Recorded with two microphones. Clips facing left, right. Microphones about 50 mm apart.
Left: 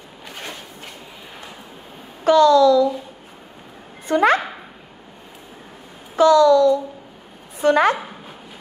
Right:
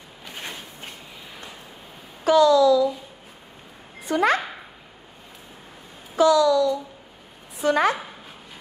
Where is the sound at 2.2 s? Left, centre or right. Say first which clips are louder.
Left 3 dB; left.